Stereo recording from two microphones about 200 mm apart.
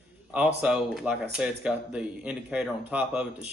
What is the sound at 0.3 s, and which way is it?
Speech, 5° right (ahead or behind).